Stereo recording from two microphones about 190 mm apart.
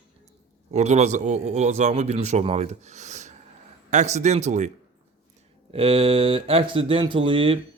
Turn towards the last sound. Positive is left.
turn(degrees=-30)  # may be behind; listen again after turning